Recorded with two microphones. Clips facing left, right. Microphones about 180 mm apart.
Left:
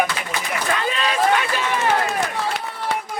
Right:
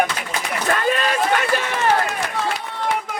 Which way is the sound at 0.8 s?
50° right (ahead or behind).